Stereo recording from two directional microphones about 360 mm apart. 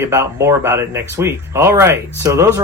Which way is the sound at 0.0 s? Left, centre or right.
Centre.